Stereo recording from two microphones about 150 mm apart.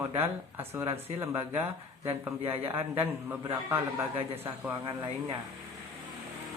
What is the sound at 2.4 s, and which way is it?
Speech, 40° right (ahead or behind).